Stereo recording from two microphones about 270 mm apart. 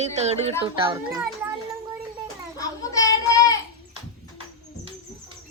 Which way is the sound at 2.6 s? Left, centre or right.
Centre.